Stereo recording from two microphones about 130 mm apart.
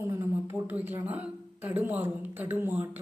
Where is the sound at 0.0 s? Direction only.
20° right (ahead or behind).